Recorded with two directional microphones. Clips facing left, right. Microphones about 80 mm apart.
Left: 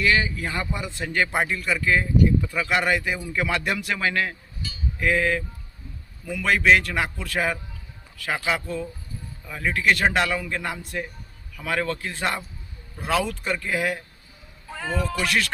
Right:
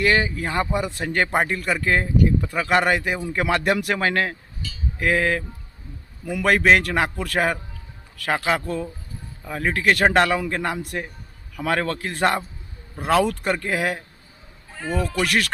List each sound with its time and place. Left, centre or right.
0.0 s a man's voice: right
15.2 s speech: right